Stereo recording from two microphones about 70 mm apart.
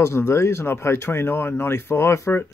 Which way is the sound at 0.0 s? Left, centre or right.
Left.